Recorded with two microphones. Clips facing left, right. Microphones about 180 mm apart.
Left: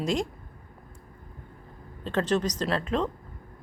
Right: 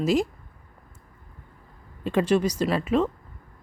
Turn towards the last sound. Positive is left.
turn(degrees=-5)  # may be behind; listen again after turning